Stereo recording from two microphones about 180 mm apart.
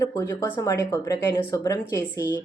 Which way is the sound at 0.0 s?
20° left (ahead or behind).